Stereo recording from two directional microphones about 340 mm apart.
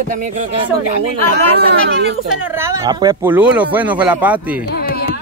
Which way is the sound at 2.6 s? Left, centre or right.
Centre.